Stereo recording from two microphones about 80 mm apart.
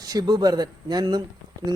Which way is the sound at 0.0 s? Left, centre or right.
Right.